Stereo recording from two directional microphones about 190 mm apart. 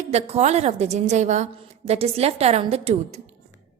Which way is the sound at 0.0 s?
35° right (ahead or behind).